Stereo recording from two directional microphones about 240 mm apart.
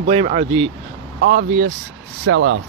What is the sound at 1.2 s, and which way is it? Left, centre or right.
Speech, right.